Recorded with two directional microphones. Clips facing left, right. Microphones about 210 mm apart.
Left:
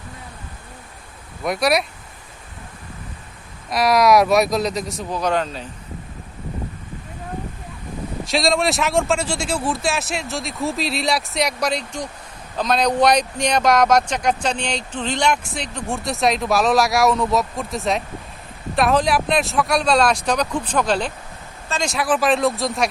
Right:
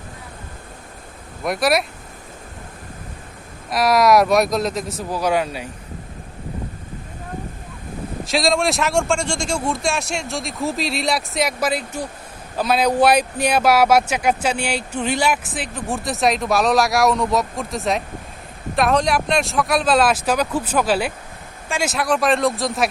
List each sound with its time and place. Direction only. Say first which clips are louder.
1.5 s speech: even; centre (ahead or behind)
3.7 s speech: even; centre (ahead or behind)
8.2 s speech: even; centre (ahead or behind)